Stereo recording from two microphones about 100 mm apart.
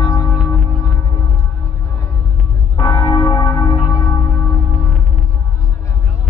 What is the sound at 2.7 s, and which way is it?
Church bell, 30° left (ahead or behind).